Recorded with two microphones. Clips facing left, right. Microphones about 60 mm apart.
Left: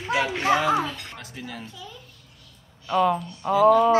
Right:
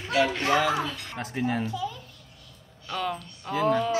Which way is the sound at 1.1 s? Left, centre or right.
Right.